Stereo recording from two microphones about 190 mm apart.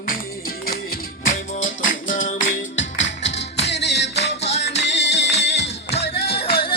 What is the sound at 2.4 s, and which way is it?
Music, 80° left.